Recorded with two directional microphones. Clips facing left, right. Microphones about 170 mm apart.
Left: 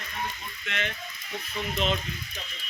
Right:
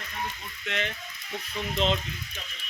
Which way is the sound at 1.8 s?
25° right (ahead or behind).